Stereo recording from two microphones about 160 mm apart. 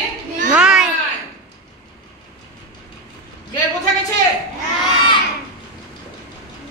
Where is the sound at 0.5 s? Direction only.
5° right (ahead or behind).